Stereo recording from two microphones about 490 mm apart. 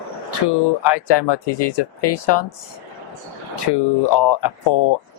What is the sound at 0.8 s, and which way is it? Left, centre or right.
Speech, left.